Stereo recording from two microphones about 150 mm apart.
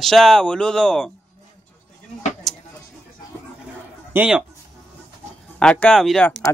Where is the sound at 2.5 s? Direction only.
Centre (ahead or behind).